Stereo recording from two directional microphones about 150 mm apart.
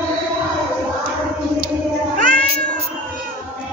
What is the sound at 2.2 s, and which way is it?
Cat, 60° right (ahead or behind).